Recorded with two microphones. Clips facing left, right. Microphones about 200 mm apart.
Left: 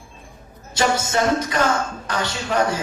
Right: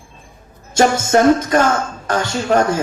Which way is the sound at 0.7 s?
45° right (ahead or behind).